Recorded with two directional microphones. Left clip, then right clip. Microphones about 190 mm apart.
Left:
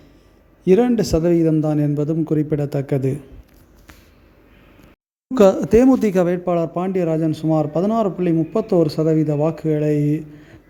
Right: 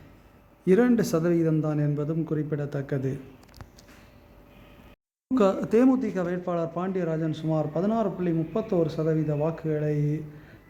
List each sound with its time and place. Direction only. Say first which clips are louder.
0.6 s a man's voice: left 6 dB; 15° left (ahead or behind)
5.3 s a man's voice: left 9 dB; 35° left (ahead or behind)
6.0 s a man's voice: left 11 dB; 45° left (ahead or behind); by 10.6 s 30° left (ahead or behind)